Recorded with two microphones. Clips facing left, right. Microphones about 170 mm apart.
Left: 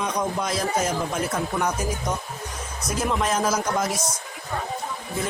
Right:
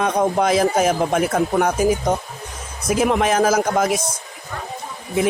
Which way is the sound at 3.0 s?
70° right (ahead or behind).